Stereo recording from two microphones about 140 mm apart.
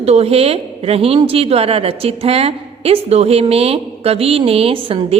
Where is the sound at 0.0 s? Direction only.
45° right (ahead or behind).